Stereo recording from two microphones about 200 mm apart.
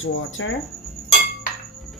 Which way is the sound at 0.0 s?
75° left (ahead or behind).